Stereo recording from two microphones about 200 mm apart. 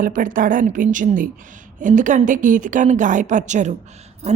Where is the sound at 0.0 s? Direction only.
40° right (ahead or behind).